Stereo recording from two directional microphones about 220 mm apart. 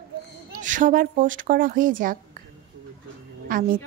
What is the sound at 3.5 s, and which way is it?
Speech, 40° right (ahead or behind).